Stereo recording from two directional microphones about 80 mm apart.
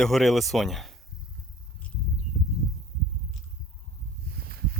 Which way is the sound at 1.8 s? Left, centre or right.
Centre.